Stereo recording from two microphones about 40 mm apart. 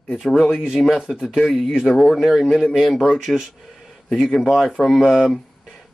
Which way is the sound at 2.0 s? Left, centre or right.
Centre.